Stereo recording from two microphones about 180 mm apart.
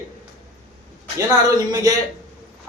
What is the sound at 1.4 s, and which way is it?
Speech, 20° right (ahead or behind).